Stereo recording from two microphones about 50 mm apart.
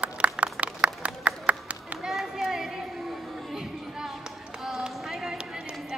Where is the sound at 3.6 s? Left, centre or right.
Centre.